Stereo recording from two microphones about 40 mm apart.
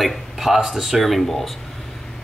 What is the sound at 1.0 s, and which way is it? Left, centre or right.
Speech, centre.